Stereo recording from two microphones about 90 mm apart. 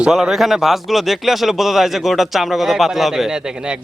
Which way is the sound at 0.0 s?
5° right (ahead or behind).